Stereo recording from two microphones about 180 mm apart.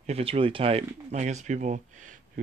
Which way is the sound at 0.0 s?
35° right (ahead or behind).